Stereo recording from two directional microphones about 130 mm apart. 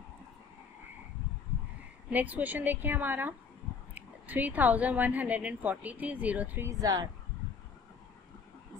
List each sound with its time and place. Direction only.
2.0 s a woman's voice: 10° right (ahead or behind)
6.7 s speech: 30° right (ahead or behind)